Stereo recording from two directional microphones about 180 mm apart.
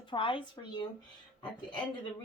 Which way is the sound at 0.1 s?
30° left (ahead or behind).